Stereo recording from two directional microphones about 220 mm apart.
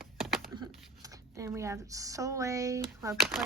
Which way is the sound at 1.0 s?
15° right (ahead or behind).